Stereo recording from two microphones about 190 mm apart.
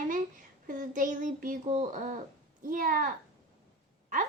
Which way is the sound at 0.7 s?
45° right (ahead or behind).